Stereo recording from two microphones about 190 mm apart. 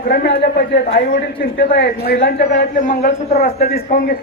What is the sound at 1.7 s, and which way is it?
A man's voice, 55° left (ahead or behind).